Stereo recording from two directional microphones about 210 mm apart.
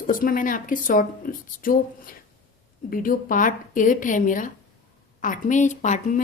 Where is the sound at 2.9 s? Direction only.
40° left (ahead or behind).